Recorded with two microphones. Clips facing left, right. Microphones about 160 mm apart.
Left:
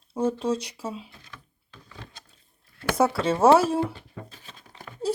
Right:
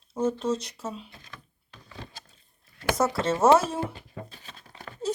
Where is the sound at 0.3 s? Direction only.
10° left (ahead or behind).